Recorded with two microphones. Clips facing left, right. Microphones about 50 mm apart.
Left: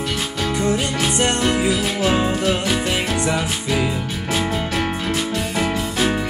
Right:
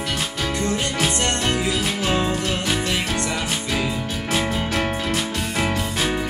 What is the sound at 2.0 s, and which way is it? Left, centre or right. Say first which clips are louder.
Music: left 4 dB; centre.